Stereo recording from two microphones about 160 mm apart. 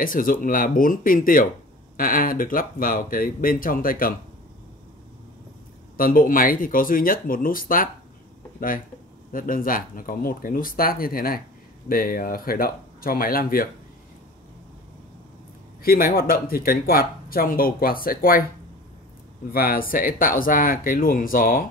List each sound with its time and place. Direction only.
0.0 s speech: 60° left (ahead or behind)
5.9 s speech: 60° left (ahead or behind)
15.8 s speech: 65° left (ahead or behind)
19.5 s speech: 65° left (ahead or behind)